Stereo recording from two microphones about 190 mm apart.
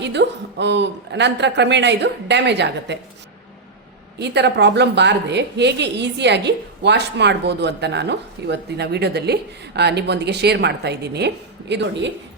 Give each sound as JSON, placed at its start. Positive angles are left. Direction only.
{"t": 0.0, "sound": "a woman's voice", "side_deg": -65}
{"t": 4.2, "sound": "a woman's voice", "side_deg": -65}